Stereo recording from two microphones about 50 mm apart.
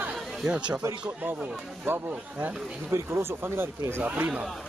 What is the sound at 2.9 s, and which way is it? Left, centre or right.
Speech, right.